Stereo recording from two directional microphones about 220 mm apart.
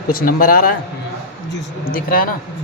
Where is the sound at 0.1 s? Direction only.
40° left (ahead or behind).